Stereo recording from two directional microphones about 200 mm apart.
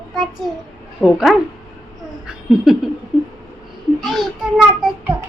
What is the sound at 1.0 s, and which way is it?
Speech, centre (ahead or behind).